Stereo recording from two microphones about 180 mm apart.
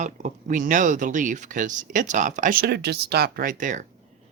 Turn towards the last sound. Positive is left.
turn(degrees=-45)  # may be behind; listen again after turning